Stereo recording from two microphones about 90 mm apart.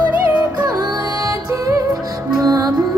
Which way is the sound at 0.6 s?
45° right (ahead or behind).